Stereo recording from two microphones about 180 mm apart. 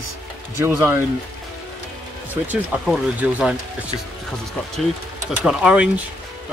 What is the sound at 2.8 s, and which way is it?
Speech, centre (ahead or behind).